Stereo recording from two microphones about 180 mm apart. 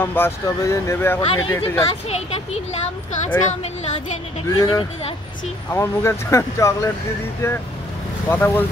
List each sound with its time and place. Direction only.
0.0 s speech: 10° left (ahead or behind)
1.2 s speech: 30° left (ahead or behind)
3.3 s speech: 15° left (ahead or behind)
4.6 s speech: 25° left (ahead or behind)